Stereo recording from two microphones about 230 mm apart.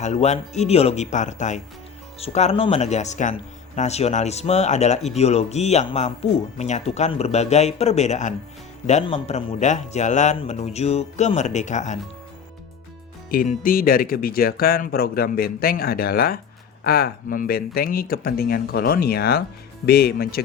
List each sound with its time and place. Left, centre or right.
0.0 s a man's voice: left
13.3 s speech: left